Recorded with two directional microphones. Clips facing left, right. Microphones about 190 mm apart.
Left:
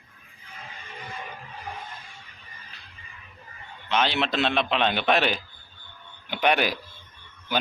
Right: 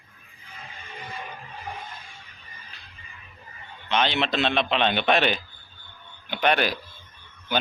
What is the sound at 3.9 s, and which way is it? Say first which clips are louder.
A man's voice: right 1 dB; 5° left (ahead or behind).